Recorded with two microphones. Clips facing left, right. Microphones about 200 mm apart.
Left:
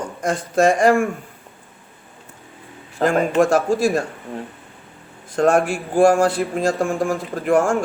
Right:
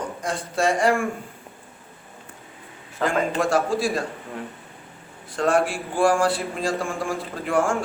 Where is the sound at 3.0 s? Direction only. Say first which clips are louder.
Left 6 dB; 45° left (ahead or behind).